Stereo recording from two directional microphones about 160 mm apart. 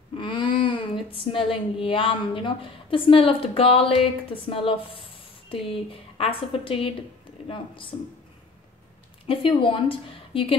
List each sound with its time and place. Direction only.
0.2 s speech: 30° left (ahead or behind)
9.3 s speech: 35° left (ahead or behind)